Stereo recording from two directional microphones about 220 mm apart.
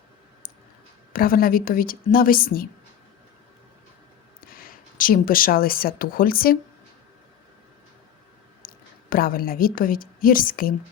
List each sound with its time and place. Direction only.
1.1 s a woman's voice: 40° left (ahead or behind)
4.5 s speech: 40° left (ahead or behind)
8.6 s a sound: 40° left (ahead or behind)
9.0 s a woman's voice: 40° left (ahead or behind)